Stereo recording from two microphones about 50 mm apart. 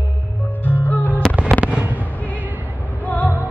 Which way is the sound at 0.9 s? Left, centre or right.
Left.